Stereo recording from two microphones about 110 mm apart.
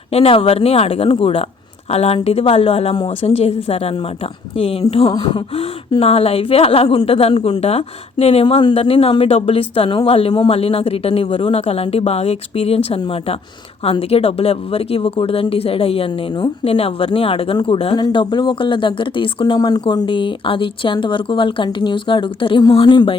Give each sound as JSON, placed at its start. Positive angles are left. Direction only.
{"t": 0.1, "sound": "speech", "side_deg": 65}
{"t": 3.2, "sound": "speech", "side_deg": 75}
{"t": 6.0, "sound": "speech", "side_deg": 65}
{"t": 14.1, "sound": "speech", "side_deg": 65}
{"t": 17.9, "sound": "speech", "side_deg": 40}
{"t": 19.5, "sound": "speech", "side_deg": 35}